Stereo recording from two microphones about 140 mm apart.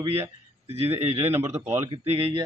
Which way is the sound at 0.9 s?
45° right (ahead or behind).